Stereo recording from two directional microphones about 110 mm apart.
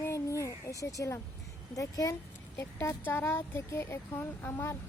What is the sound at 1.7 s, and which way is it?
A child's voice, 30° left (ahead or behind).